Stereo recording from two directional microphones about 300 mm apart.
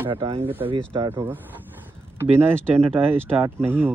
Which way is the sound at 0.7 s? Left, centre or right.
Centre.